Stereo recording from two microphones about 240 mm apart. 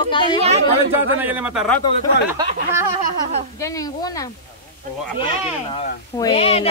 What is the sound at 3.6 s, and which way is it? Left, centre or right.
Speech, centre.